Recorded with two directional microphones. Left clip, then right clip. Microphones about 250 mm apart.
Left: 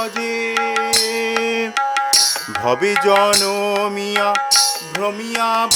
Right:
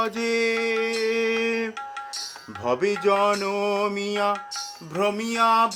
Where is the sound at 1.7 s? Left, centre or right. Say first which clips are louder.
Left 17 dB; left.